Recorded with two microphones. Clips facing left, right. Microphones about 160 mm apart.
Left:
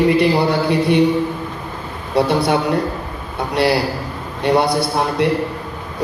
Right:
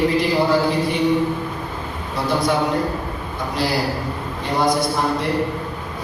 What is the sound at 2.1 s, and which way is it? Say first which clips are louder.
Speech: left 5 dB; 70° left (ahead or behind).